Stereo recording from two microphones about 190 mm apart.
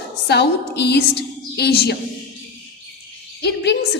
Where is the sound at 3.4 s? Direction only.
60° left (ahead or behind).